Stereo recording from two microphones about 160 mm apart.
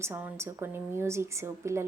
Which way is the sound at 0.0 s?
15° right (ahead or behind).